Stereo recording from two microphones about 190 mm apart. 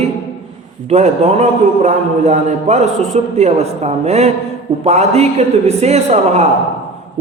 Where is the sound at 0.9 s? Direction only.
35° right (ahead or behind).